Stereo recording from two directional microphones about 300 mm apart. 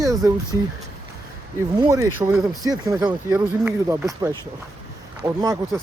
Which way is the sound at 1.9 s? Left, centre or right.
Centre.